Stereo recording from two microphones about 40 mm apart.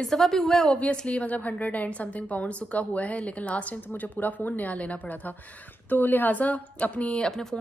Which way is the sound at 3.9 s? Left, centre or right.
Left.